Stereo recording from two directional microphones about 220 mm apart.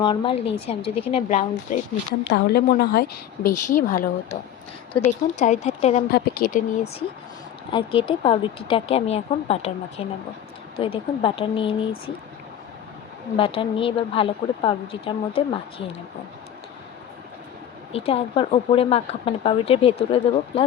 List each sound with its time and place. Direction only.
0.0 s speech: 20° left (ahead or behind)
2.2 s a woman's voice: 50° left (ahead or behind); by 6.0 s 30° left (ahead or behind)
6.1 s speech: 45° left (ahead or behind); by 11.8 s 25° left (ahead or behind)
13.3 s speech: 25° left (ahead or behind)
17.9 s speech: 25° left (ahead or behind)